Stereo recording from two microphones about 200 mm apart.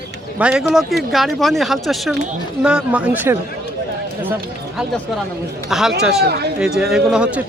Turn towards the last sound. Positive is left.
turn(degrees=-5)  # may be behind; listen again after turning